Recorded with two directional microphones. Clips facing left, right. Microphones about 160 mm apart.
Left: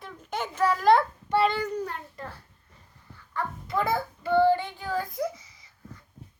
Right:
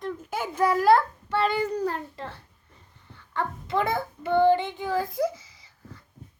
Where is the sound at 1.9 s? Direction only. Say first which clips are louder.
Right 5 dB; 30° right (ahead or behind).